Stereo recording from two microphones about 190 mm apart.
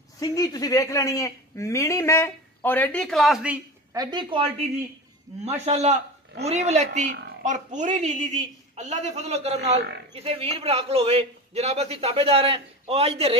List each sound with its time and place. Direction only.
0.2 s speech: 20° left (ahead or behind); by 3.6 s 5° right (ahead or behind)
3.9 s a woman's voice: 20° right (ahead or behind)